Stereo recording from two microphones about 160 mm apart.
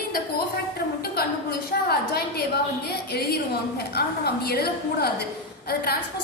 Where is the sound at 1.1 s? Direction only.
80° left.